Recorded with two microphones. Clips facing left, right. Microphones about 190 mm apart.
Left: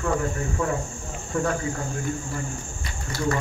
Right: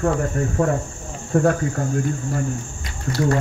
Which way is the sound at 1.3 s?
55° right (ahead or behind).